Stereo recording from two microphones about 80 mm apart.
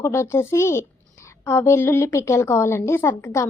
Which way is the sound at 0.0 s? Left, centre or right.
Left.